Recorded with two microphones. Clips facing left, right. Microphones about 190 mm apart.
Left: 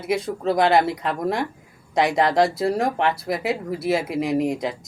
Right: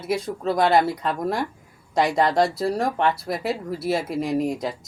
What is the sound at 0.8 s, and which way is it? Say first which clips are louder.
Speech: left 1 dB; 20° left (ahead or behind).